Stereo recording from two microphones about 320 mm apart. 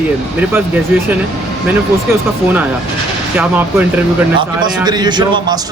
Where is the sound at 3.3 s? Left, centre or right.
Centre.